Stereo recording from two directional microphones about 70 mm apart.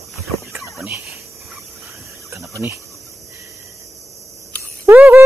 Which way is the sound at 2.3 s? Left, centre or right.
Right.